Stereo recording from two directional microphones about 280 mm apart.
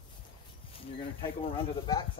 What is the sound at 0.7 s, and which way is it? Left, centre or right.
Speech, centre.